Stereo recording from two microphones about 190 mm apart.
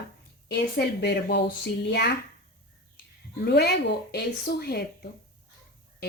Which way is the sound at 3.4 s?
60° left (ahead or behind).